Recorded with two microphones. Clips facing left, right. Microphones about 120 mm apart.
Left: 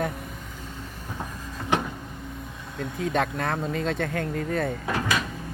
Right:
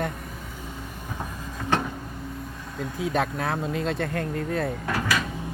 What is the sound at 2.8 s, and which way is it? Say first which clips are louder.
Speech: even; 5° right (ahead or behind).